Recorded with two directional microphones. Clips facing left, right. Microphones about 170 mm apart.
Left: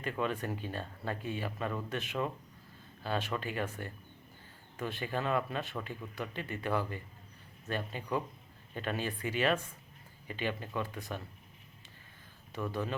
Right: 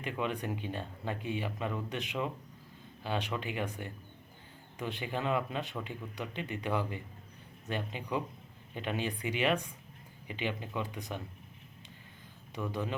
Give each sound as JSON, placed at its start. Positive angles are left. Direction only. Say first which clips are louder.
{"t": 0.0, "sound": "speech", "louder": "even", "side_deg": -15}
{"t": 12.5, "sound": "speech", "louder": "even", "side_deg": -15}